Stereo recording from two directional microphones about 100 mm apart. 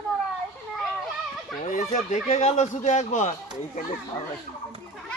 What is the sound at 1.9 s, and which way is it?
Speech, 90° left.